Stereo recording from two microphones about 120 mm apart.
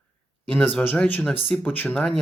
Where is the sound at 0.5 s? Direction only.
15° left (ahead or behind).